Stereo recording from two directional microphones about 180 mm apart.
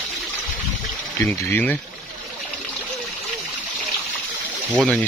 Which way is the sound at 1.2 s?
15° left (ahead or behind).